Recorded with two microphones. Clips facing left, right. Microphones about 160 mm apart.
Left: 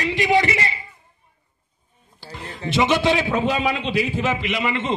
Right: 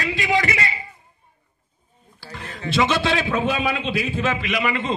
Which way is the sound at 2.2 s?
20° left (ahead or behind).